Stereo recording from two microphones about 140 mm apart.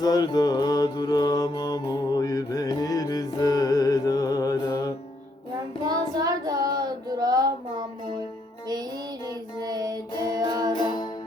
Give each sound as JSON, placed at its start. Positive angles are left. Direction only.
{"t": 0.0, "sound": "mantra", "side_deg": 30}
{"t": 5.8, "sound": "child singing", "side_deg": -30}
{"t": 9.6, "sound": "music", "side_deg": -30}
{"t": 10.8, "sound": "music", "side_deg": 35}